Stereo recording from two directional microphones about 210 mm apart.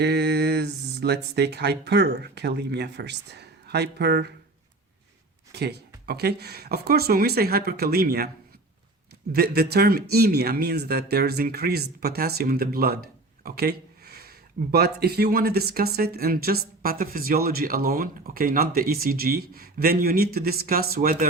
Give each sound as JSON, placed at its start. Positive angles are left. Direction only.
{"t": 0.0, "sound": "speech", "side_deg": -50}
{"t": 5.5, "sound": "speech", "side_deg": -50}
{"t": 9.3, "sound": "speech", "side_deg": -50}